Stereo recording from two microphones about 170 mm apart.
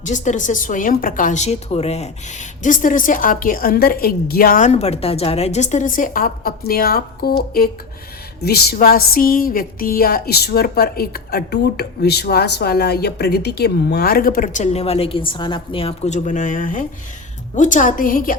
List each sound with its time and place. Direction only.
0.0 s a woman's voice: 45° left (ahead or behind)
2.6 s a woman's voice: 50° left (ahead or behind)